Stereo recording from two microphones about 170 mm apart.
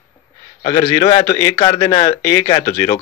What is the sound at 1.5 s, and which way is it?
Speech, 30° left (ahead or behind).